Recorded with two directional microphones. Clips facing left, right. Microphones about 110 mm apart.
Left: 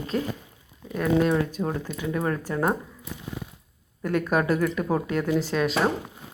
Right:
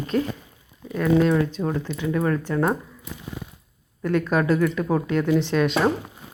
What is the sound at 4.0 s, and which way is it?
Speech, 15° left (ahead or behind).